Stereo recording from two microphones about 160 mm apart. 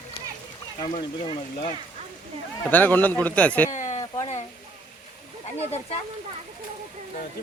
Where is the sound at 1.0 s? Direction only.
30° left (ahead or behind).